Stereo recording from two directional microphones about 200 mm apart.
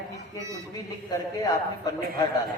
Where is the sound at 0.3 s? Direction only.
15° right (ahead or behind).